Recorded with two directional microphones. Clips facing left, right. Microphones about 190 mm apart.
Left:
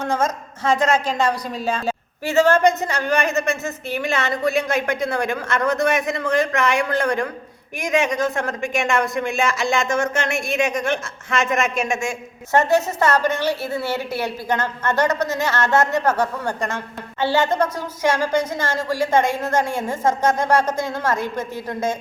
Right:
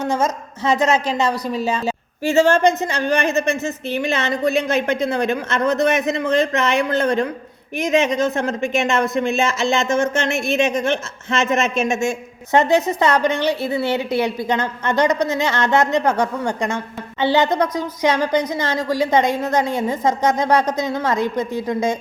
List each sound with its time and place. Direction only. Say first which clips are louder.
2.2 s a woman's voice: right 1 dB; 15° right (ahead or behind)
17.2 s a woman's voice: right 2 dB; 15° right (ahead or behind)